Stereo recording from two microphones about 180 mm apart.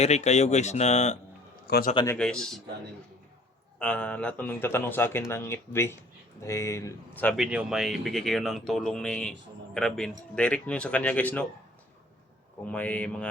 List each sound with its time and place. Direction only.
0.0 s speech: 40° left (ahead or behind)
1.6 s a man's voice: 60° left (ahead or behind)
2.1 s speech: 5° left (ahead or behind)
3.8 s speech: 5° left (ahead or behind)
7.3 s speech: centre (ahead or behind)
12.6 s speech: 10° left (ahead or behind)